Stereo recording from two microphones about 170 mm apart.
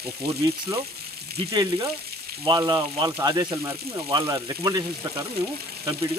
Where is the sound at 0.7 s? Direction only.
20° right (ahead or behind).